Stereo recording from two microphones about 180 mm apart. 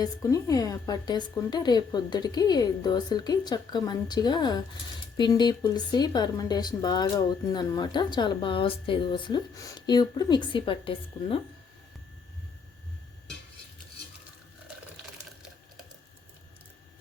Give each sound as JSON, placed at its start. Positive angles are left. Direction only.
{"t": 0.0, "sound": "a woman's voice", "side_deg": 20}